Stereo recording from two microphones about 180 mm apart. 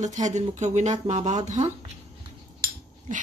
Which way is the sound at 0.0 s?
40° right (ahead or behind).